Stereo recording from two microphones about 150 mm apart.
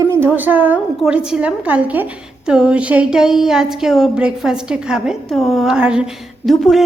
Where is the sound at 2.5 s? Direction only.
5° right (ahead or behind).